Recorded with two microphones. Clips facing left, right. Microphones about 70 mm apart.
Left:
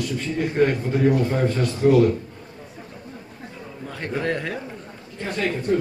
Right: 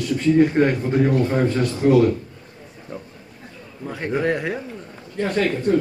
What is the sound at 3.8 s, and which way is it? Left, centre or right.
Speech, centre.